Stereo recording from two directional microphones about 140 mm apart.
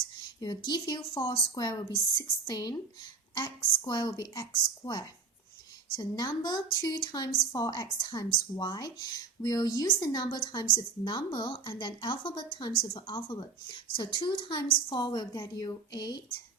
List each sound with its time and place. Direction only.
0.3 s a woman's voice: 30° left (ahead or behind)